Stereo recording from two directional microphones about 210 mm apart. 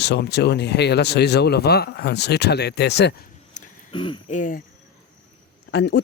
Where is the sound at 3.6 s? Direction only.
35° left (ahead or behind).